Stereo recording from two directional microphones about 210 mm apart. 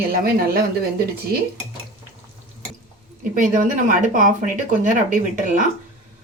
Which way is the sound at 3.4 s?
40° right (ahead or behind).